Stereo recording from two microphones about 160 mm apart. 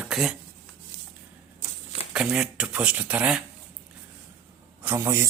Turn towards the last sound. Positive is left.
turn(degrees=-15)  # may be behind; listen again after turning